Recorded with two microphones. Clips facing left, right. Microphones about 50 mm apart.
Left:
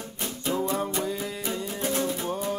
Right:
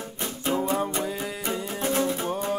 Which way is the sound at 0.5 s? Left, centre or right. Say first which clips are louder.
Right 2 dB; right.